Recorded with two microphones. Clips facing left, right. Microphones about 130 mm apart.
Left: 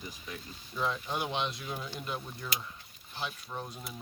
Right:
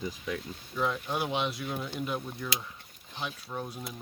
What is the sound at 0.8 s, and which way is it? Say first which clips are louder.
Speech: right 3 dB; 5° right (ahead or behind).